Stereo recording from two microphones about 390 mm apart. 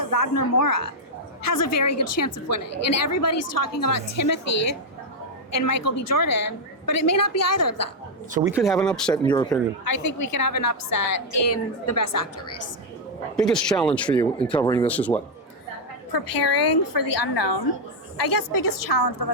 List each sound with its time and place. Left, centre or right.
0.0 s a woman's voice: left
3.7 s a woman's voice: left
8.3 s speech: centre
8.5 s speech: centre
10.2 s a woman's voice: left
13.3 s speech: centre
16.1 s a woman's voice: left
18.2 s a woman's voice: left